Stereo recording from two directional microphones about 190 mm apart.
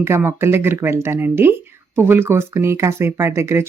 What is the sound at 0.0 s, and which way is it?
Speech, 15° right (ahead or behind).